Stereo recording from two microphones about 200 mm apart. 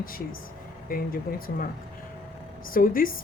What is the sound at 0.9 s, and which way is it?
Speech, 45° left (ahead or behind).